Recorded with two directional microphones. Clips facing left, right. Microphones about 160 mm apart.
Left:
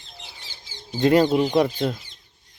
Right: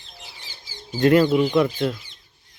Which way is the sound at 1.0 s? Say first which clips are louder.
Right 1 dB; 30° left (ahead or behind).